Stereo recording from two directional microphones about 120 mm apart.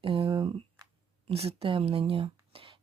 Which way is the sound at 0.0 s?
50° right (ahead or behind).